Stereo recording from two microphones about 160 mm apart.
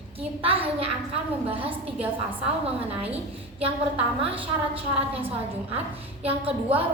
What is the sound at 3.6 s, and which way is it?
A woman's voice, 35° right (ahead or behind).